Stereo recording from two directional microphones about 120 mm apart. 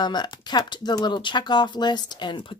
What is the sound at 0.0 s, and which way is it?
Speech, 35° left (ahead or behind).